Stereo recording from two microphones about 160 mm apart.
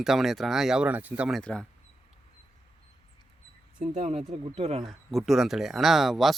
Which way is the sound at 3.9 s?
40° right (ahead or behind).